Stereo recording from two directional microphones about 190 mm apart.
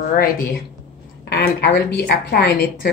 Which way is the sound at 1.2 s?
55° left (ahead or behind).